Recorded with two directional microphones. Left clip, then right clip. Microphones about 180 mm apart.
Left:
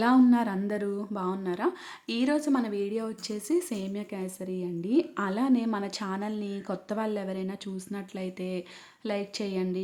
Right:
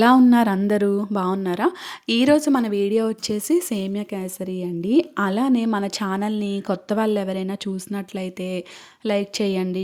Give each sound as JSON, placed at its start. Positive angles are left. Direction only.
{"t": 0.0, "sound": "a woman's voice", "side_deg": -45}